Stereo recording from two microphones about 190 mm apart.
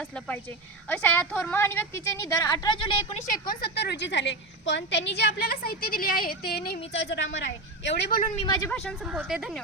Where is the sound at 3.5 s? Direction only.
55° left (ahead or behind).